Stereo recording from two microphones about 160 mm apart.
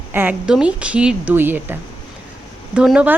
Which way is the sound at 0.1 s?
10° right (ahead or behind).